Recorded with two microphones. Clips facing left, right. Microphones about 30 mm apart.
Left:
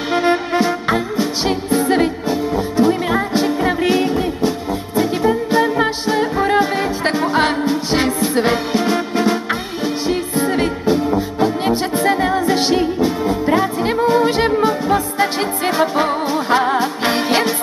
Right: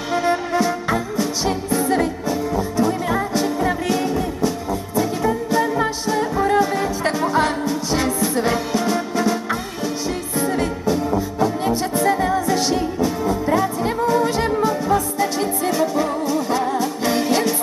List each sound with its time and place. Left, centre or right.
0.1 s music: left